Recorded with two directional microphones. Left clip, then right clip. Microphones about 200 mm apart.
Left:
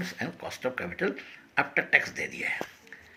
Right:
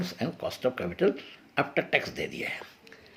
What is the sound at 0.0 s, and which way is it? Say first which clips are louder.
Speech: right 2 dB; 45° right (ahead or behind).